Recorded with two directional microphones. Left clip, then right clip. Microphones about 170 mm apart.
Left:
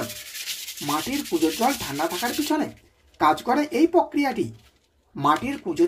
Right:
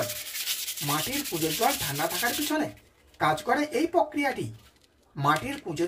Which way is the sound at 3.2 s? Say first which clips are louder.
Left 5 dB; 20° left (ahead or behind).